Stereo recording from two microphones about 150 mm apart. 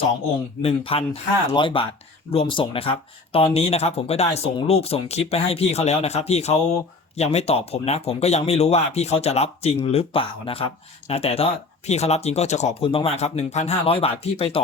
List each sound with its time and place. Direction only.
0.6 s speech: 40° left (ahead or behind)